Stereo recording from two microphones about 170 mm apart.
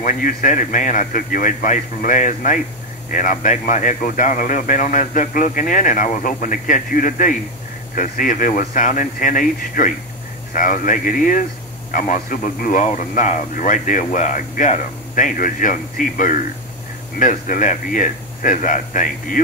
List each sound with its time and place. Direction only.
0.0 s speech: 55° left (ahead or behind)